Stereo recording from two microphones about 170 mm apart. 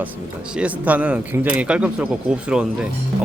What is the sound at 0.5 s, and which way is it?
A man's voice, 10° right (ahead or behind).